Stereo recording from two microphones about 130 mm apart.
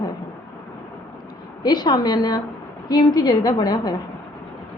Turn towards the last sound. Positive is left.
turn(degrees=35)  # may be behind; listen again after turning